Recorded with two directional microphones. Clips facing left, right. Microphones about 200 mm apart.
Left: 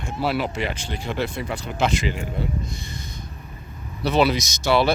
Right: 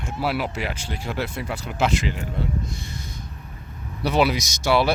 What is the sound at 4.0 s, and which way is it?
Speech, 10° right (ahead or behind).